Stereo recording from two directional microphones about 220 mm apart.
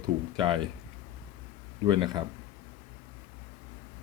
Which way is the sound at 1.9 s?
20° right (ahead or behind).